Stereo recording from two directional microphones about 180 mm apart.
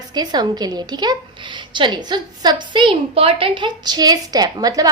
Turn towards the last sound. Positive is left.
turn(degrees=-20)  # may be behind; listen again after turning